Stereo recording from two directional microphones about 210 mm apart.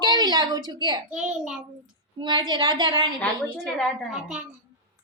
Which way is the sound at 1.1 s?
5° right (ahead or behind).